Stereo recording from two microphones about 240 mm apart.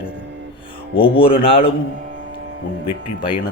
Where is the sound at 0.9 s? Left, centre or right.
Left.